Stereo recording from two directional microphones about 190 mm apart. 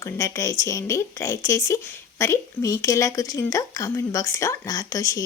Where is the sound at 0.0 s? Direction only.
15° left (ahead or behind).